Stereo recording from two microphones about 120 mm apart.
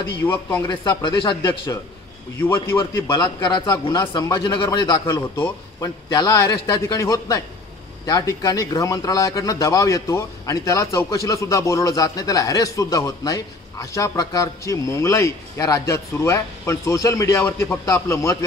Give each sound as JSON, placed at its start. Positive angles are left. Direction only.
{"t": 0.2, "sound": "speech", "side_deg": 20}
{"t": 0.7, "sound": "speech", "side_deg": 40}
{"t": 2.9, "sound": "a man's voice", "side_deg": 35}